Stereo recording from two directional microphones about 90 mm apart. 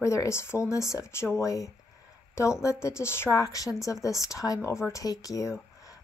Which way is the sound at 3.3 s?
40° left (ahead or behind).